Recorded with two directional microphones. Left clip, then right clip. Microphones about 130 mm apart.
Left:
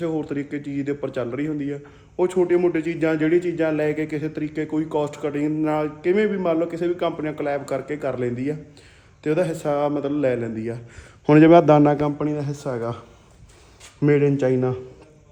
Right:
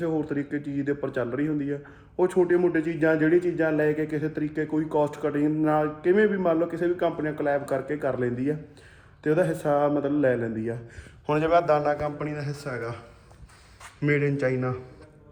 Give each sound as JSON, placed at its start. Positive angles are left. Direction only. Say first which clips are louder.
{"t": 0.0, "sound": "a man's voice", "louder": "left 2 dB", "side_deg": 10}
{"t": 11.3, "sound": "a man's voice", "louder": "left 8 dB", "side_deg": 85}
{"t": 12.7, "sound": "speech", "louder": "left 6 dB", "side_deg": 25}
{"t": 14.0, "sound": "speech", "louder": "left 6 dB", "side_deg": 25}